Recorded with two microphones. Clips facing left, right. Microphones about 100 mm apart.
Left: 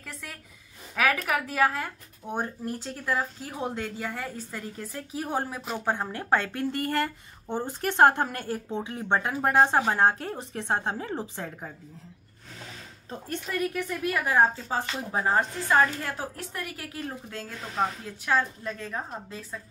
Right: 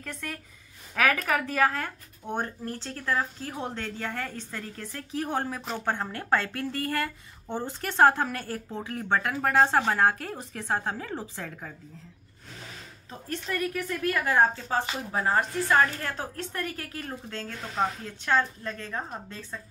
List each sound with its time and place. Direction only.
0.0 s a woman's voice: 5° left (ahead or behind); by 11.7 s 20° left (ahead or behind)
13.5 s a woman's voice: 10° left (ahead or behind)